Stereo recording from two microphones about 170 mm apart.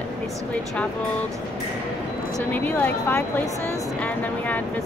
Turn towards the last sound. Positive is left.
turn(degrees=10)  # may be behind; listen again after turning